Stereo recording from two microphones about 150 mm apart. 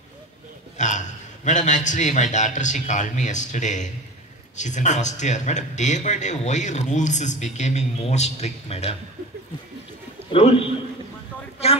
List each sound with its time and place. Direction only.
0.7 s a man's voice: 55° left (ahead or behind)
10.3 s a man's voice: 40° left (ahead or behind)